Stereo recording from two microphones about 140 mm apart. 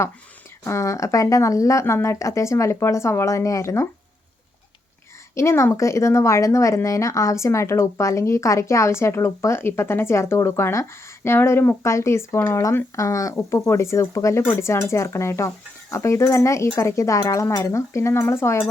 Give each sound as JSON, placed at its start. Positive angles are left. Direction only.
{"t": 0.6, "sound": "speech", "side_deg": 20}
{"t": 5.3, "sound": "speech", "side_deg": 20}